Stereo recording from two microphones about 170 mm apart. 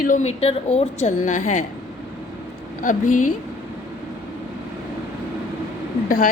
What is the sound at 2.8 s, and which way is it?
Speech, 50° left (ahead or behind).